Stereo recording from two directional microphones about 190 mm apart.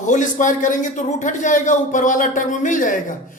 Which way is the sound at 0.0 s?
40° left (ahead or behind).